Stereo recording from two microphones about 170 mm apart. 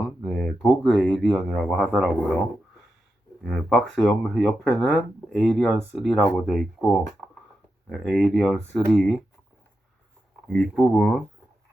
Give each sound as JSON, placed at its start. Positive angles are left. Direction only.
{"t": 0.2, "sound": "speech", "side_deg": 0}
{"t": 3.4, "sound": "speech", "side_deg": 0}
{"t": 10.5, "sound": "speech", "side_deg": 5}